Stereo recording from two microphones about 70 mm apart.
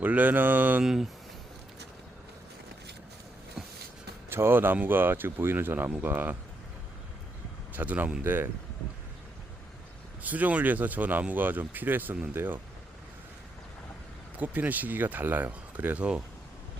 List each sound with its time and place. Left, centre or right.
0.0 s speech: right
0.8 s speech: centre
4.3 s speech: right
7.8 s speech: right
10.2 s speech: right
14.3 s speech: right